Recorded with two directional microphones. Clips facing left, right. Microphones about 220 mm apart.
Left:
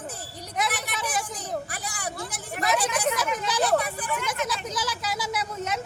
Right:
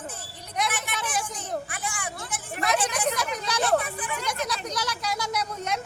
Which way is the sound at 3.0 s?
Centre (ahead or behind).